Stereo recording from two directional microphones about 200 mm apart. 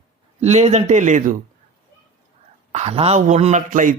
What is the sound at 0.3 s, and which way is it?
A man's voice, 35° right (ahead or behind).